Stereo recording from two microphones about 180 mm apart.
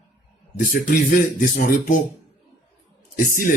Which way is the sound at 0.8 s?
50° left (ahead or behind).